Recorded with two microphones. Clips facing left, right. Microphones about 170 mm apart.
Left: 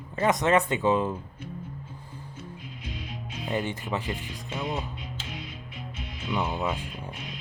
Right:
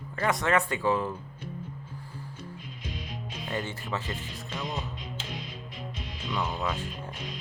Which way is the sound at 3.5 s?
15° left (ahead or behind).